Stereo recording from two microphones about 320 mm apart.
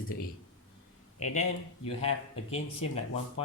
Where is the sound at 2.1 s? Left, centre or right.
Left.